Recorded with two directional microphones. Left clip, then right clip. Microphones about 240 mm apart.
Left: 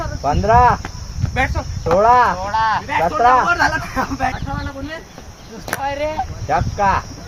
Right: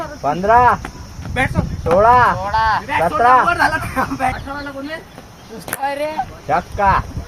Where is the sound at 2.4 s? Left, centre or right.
Right.